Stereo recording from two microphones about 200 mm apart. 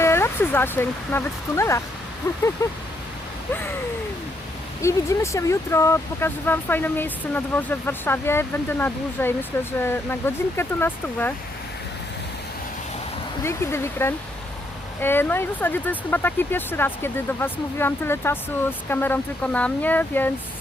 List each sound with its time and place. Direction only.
0.0 s speech: 10° left (ahead or behind)
4.8 s speech: 15° left (ahead or behind)
13.4 s speech: 15° left (ahead or behind)